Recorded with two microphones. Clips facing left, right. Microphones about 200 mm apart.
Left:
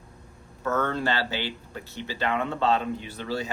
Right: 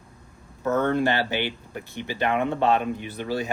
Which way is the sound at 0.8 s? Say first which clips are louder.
Right 5 dB; 15° right (ahead or behind).